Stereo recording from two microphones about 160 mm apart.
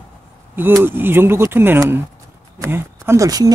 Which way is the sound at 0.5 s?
15° right (ahead or behind).